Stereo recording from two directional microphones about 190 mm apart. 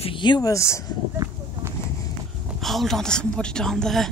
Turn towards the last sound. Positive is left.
turn(degrees=0)  # may be behind; listen again after turning